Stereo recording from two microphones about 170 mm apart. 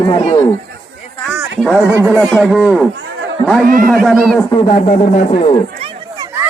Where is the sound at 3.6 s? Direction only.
55° right (ahead or behind).